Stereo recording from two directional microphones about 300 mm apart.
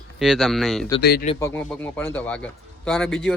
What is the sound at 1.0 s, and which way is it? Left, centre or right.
Speech, left.